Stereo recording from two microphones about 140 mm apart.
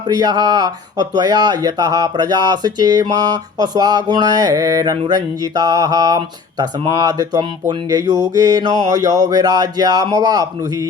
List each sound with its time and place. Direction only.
0.0 s speech: 30° right (ahead or behind)